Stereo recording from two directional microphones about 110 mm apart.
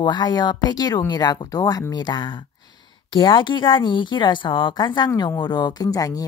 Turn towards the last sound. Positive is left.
turn(degrees=35)  # may be behind; listen again after turning